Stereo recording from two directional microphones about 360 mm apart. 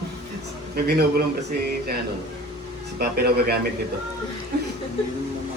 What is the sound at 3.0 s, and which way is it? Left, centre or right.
Speech, right.